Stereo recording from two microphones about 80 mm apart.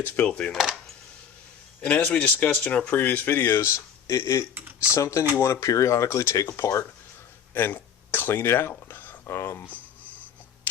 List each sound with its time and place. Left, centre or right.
0.0 s speech: centre
0.5 s a sound: centre
1.8 s speech: centre; by 4.4 s left
4.5 s speech: centre
4.9 s speech: left
7.5 s speech: left
8.7 s a sound: left
9.6 s writing: left